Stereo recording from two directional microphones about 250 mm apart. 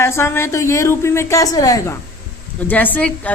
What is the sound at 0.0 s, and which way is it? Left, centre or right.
A woman's voice, centre.